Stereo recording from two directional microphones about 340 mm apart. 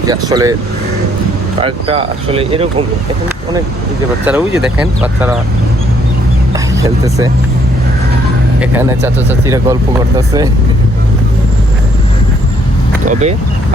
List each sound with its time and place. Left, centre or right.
0.1 s speech: centre
1.6 s speech: centre
4.3 s speech: centre
6.7 s speech: centre
8.6 s speech: centre
13.1 s speech: centre